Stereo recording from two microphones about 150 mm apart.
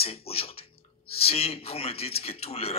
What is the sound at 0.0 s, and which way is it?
A man's voice, 40° left (ahead or behind).